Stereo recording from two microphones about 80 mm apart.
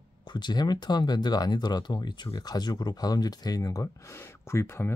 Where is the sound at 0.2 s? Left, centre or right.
Left.